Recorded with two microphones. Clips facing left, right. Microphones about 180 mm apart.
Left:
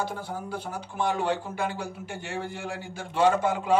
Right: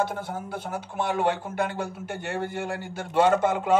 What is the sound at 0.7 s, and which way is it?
Speech, 60° right (ahead or behind).